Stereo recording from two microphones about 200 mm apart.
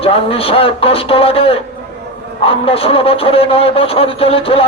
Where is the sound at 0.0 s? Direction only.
30° left (ahead or behind).